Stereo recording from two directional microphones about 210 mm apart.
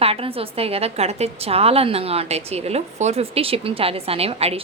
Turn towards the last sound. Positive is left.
turn(degrees=-30)  # may be behind; listen again after turning